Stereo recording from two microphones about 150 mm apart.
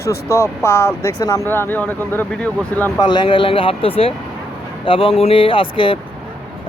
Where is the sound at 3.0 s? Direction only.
30° left (ahead or behind).